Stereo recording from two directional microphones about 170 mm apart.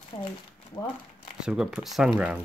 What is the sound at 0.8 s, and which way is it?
Speech, 15° left (ahead or behind).